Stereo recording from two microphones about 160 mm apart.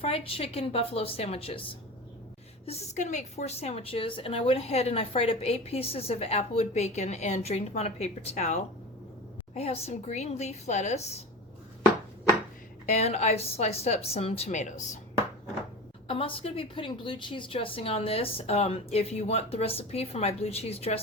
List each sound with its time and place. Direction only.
0.0 s a woman's voice: 35° left (ahead or behind)
12.8 s a woman's voice: 45° left (ahead or behind)
16.0 s a woman's voice: 35° left (ahead or behind)